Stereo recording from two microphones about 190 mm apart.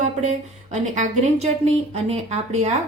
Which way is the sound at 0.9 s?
40° right (ahead or behind).